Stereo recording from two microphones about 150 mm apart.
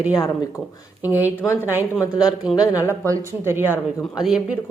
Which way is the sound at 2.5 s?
Centre (ahead or behind).